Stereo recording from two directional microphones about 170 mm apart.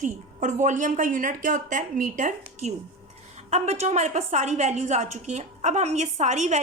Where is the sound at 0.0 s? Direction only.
45° right (ahead or behind).